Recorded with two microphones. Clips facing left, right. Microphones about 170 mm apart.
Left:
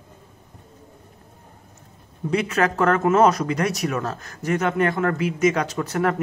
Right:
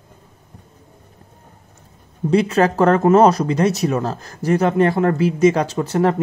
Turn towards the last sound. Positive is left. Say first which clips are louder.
# right 5 dB
turn(degrees=-30)  # may be behind; listen again after turning